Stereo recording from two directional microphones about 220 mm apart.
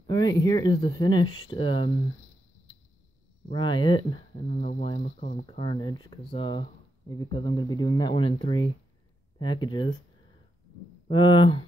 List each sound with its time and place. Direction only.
0.0 s speech: 20° left (ahead or behind)
3.4 s speech: 20° left (ahead or behind)
4.5 s speech: 35° left (ahead or behind)
11.1 s speech: 20° left (ahead or behind)